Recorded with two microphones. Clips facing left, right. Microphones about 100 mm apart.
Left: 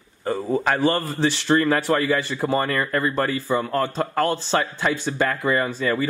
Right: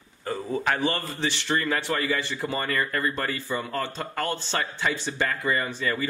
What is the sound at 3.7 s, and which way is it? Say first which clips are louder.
A man's voice: left 7 dB; 45° left (ahead or behind).